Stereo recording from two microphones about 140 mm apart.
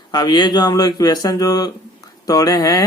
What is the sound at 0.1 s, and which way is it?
Speech, 30° left (ahead or behind).